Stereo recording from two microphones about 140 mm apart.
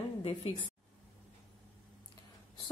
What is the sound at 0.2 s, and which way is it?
Speech, 40° left (ahead or behind).